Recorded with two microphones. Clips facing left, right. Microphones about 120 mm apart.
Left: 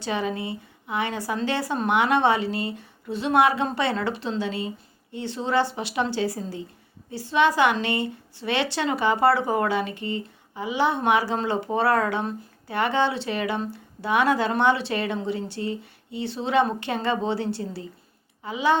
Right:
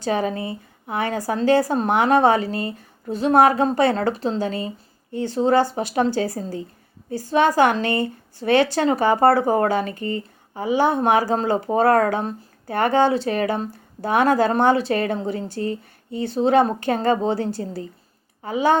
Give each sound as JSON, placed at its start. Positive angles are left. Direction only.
{"t": 0.0, "sound": "a woman's voice", "side_deg": -40}